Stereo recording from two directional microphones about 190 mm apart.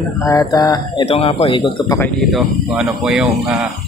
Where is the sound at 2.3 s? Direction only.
Centre (ahead or behind).